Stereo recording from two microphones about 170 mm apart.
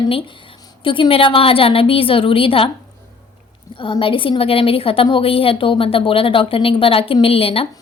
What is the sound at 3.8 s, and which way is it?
A woman's voice, 30° left (ahead or behind).